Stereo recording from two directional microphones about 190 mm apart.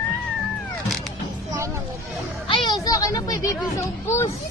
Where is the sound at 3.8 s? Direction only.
15° left (ahead or behind).